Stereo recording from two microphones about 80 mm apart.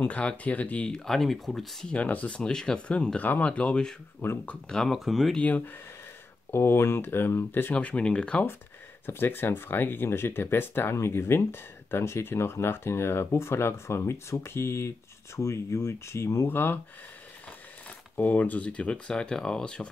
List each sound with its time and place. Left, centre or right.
0.0 s speech: centre
2.0 s speech: centre
6.5 s speech: left; by 8.5 s centre
9.0 s speech: left
16.4 s speech: left
18.1 s speech: left